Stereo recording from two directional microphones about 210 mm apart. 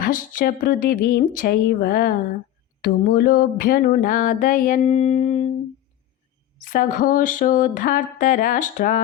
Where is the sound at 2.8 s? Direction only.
45° left (ahead or behind).